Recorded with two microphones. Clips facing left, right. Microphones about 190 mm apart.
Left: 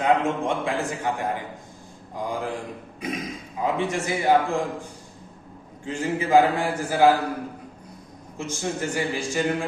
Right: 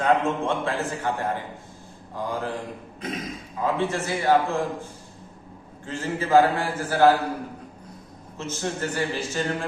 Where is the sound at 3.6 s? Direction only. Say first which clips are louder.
Even; 15° left (ahead or behind).